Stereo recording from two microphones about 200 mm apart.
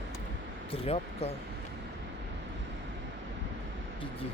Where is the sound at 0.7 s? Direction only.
30° left (ahead or behind).